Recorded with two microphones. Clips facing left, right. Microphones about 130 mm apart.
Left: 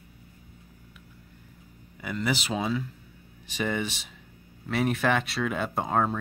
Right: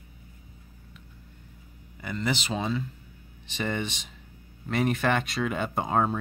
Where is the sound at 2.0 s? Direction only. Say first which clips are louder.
Left 1 dB; 5° left (ahead or behind).